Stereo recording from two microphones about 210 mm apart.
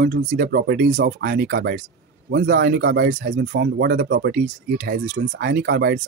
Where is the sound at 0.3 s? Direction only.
50° right (ahead or behind).